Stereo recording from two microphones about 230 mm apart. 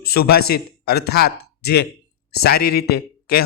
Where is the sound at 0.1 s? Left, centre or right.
Left.